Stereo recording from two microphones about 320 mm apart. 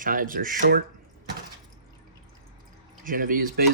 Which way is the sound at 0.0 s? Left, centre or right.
Right.